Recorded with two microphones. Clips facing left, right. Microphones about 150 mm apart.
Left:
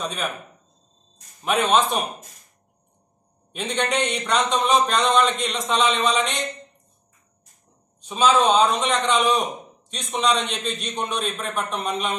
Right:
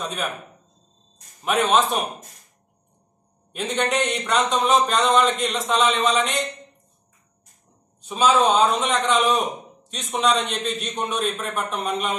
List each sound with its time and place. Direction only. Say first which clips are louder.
0.0 s speech: even; 5° right (ahead or behind)
1.4 s speech: even; centre (ahead or behind)
3.5 s speech: right 1 dB; 5° right (ahead or behind)
8.0 s speech: even; 5° right (ahead or behind)